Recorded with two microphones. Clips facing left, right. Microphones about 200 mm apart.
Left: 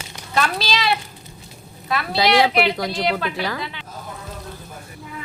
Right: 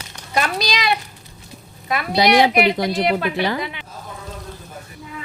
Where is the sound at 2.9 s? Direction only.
5° right (ahead or behind).